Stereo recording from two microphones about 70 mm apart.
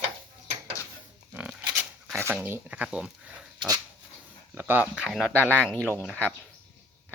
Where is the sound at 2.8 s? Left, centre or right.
Centre.